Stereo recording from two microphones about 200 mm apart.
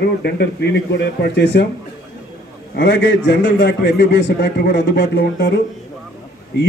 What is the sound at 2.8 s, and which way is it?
A man's voice, 60° left (ahead or behind).